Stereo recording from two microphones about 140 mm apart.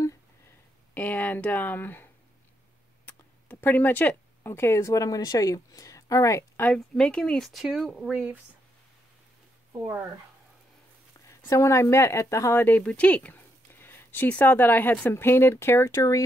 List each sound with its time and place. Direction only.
0.9 s speech: 10° left (ahead or behind)
3.1 s speech: 10° left (ahead or behind); by 8.4 s 5° right (ahead or behind)
11.2 s speech: 20° left (ahead or behind)